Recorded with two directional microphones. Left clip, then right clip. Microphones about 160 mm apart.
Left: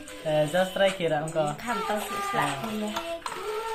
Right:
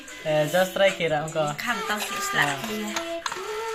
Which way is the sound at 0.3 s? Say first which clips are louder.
Right 2 dB; 35° right (ahead or behind).